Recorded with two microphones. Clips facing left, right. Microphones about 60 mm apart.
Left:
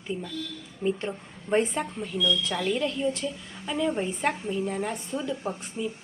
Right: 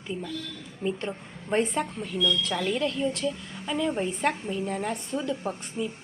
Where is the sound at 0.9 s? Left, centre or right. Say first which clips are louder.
Left 2 dB; centre.